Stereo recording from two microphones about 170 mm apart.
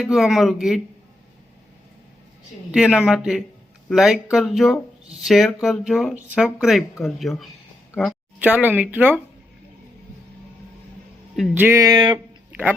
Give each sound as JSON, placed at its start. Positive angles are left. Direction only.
{"t": 0.0, "sound": "speech", "side_deg": 0}
{"t": 2.7, "sound": "speech", "side_deg": -5}
{"t": 8.4, "sound": "speech", "side_deg": -10}
{"t": 11.5, "sound": "speech", "side_deg": -15}
{"t": 12.5, "sound": "music", "side_deg": -10}